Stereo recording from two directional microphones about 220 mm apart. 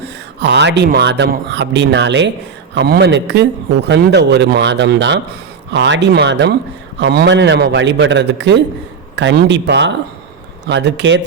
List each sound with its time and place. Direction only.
0.0 s speech: 50° right (ahead or behind)